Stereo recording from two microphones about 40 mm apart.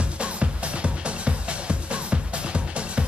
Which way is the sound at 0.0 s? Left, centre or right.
Right.